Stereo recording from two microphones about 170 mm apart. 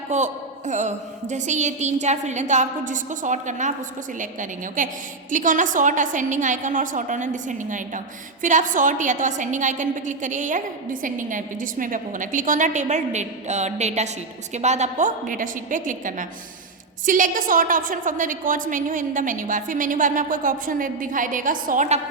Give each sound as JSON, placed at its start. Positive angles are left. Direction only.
{"t": 0.1, "sound": "a woman's voice", "side_deg": -45}